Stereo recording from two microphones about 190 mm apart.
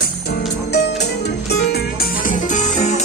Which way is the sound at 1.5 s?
55° left (ahead or behind).